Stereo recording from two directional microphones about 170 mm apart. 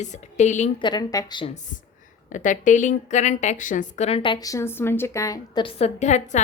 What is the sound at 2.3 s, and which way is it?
A woman's voice, 50° left (ahead or behind).